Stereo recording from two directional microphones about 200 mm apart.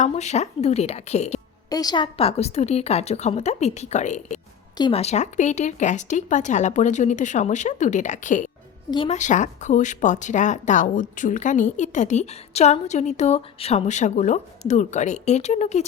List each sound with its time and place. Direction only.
0.0 s speech: 35° left (ahead or behind)
1.7 s speech: 20° left (ahead or behind); by 8.4 s 40° left (ahead or behind)
8.9 s a woman's voice: 25° left (ahead or behind)
9.1 s speech: 40° left (ahead or behind)